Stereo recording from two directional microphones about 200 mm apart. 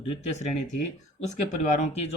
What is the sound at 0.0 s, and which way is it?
Speech, 35° left (ahead or behind).